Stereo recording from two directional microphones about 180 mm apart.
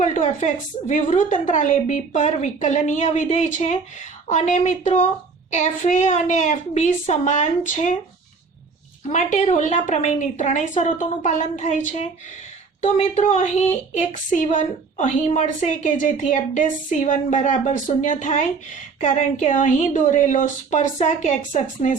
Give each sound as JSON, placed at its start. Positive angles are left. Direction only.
{"t": 0.0, "sound": "a woman's voice", "side_deg": 40}
{"t": 9.0, "sound": "a woman's voice", "side_deg": 45}